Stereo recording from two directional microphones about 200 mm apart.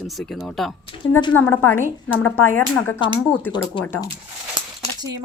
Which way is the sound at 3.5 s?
25° left (ahead or behind).